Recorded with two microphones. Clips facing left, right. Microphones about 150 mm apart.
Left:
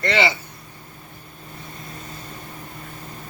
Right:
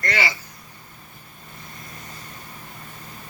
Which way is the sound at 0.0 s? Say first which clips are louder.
Left 5 dB; 25° left (ahead or behind).